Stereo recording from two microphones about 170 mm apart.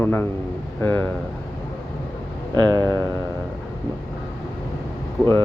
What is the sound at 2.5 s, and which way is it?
Speech, 25° right (ahead or behind).